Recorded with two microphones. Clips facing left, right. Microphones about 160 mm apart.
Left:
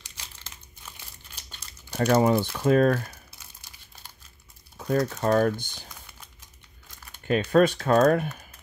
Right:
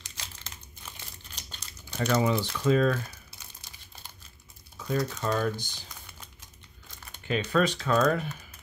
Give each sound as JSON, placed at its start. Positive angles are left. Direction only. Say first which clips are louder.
{"t": 0.9, "sound": "crumpling", "louder": "right 2 dB", "side_deg": 10}
{"t": 1.9, "sound": "speech", "louder": "left 5 dB", "side_deg": 50}
{"t": 4.7, "sound": "speech", "louder": "left 5 dB", "side_deg": 50}
{"t": 7.2, "sound": "speech", "louder": "left 6 dB", "side_deg": 45}